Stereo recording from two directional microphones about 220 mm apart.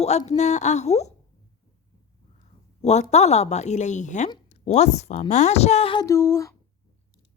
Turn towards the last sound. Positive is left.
turn(degrees=10)  # may be behind; listen again after turning